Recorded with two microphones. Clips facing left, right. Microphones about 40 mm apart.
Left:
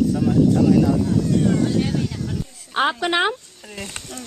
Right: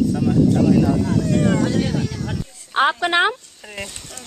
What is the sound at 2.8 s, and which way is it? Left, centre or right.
Speech, centre.